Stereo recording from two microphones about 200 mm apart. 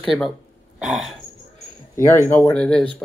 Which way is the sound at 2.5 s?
5° left (ahead or behind).